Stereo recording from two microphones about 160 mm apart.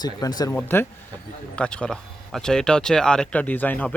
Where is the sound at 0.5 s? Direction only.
15° left (ahead or behind).